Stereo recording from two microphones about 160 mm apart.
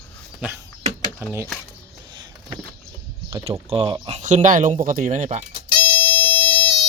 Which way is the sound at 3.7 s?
35° right (ahead or behind).